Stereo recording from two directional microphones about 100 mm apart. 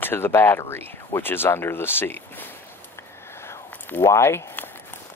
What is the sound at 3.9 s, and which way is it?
Speech, 25° left (ahead or behind).